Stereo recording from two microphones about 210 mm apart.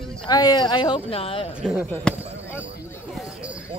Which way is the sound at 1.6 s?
5° right (ahead or behind).